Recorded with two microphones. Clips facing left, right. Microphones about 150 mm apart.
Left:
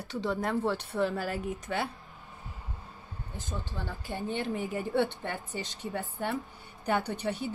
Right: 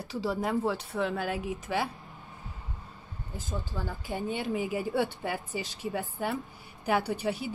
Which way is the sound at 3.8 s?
5° right (ahead or behind).